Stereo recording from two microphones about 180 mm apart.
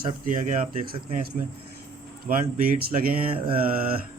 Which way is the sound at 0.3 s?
45° right (ahead or behind).